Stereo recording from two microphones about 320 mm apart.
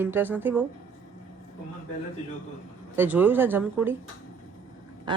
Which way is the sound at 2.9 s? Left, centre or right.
Centre.